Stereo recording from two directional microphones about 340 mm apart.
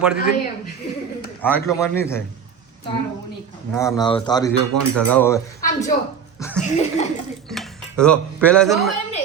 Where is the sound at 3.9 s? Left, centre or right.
Centre.